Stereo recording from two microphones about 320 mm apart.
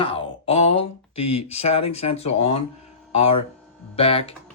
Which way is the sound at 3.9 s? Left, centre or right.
Centre.